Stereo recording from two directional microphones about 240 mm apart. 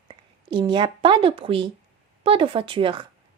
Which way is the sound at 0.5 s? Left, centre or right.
Centre.